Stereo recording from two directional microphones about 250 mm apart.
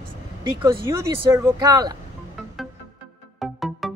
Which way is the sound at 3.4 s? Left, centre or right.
Centre.